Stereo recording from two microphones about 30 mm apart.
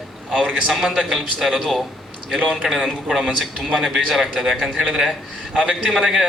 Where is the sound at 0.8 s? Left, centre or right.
Centre.